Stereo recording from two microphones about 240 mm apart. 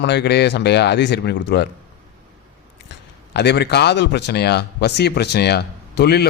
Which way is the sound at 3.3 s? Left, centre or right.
Left.